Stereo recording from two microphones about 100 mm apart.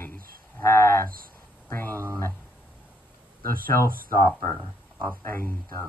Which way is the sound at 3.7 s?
25° left (ahead or behind).